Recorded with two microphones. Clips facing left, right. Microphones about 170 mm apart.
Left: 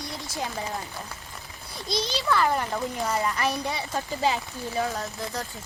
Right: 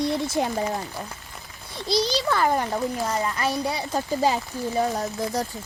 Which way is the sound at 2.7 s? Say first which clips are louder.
Right 2 dB; 15° right (ahead or behind).